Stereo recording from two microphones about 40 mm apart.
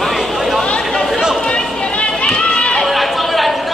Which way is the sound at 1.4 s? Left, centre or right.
Left.